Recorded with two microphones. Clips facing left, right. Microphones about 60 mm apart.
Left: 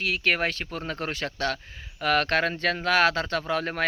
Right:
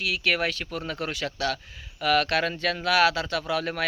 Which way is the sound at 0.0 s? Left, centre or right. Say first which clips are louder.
Left 1 dB; left.